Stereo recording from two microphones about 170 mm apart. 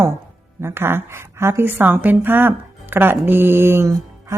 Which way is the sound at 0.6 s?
15° right (ahead or behind).